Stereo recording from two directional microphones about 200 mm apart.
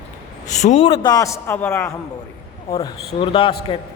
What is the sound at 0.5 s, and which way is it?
Speech, 35° left (ahead or behind).